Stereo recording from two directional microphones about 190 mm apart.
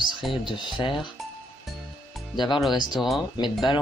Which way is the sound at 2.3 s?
25° left (ahead or behind).